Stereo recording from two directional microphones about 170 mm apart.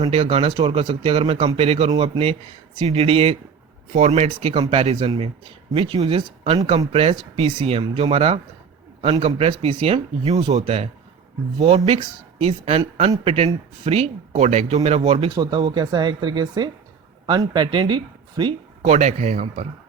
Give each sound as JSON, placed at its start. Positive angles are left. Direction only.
{"t": 0.0, "sound": "a man's voice", "side_deg": -35}
{"t": 15.3, "sound": "speech", "side_deg": -25}
{"t": 18.8, "sound": "speech", "side_deg": -40}